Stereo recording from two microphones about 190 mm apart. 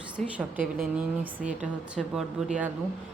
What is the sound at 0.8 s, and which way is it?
A woman's voice, 10° right (ahead or behind).